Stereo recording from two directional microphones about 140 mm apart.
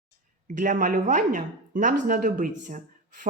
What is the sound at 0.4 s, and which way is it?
Speech, 65° right (ahead or behind).